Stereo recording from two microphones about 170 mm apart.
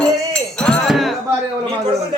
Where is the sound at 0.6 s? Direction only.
Centre (ahead or behind).